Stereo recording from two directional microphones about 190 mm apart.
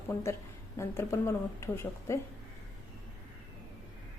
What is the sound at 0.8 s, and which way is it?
A woman's voice, 15° left (ahead or behind).